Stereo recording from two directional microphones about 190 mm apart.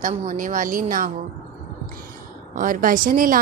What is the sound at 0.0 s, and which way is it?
Speech, 45° right (ahead or behind).